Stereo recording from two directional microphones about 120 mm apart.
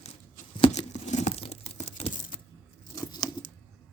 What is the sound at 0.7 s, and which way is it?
Tearing, 75° left (ahead or behind).